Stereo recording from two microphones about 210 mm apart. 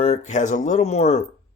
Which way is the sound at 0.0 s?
30° left (ahead or behind).